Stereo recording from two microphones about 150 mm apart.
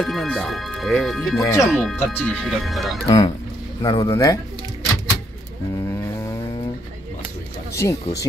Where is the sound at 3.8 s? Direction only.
25° left (ahead or behind).